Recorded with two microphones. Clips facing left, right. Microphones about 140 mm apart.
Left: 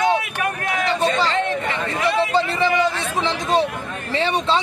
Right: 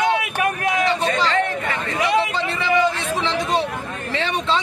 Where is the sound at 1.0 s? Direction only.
25° left (ahead or behind).